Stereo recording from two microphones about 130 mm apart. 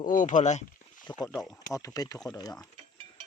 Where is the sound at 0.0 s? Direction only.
85° left; by 1.0 s 70° left (ahead or behind).